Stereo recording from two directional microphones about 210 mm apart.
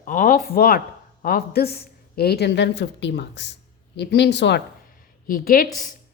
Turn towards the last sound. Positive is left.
turn(degrees=40)  # may be behind; listen again after turning